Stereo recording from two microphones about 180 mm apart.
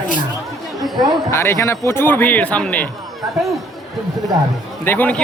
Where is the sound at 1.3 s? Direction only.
15° left (ahead or behind).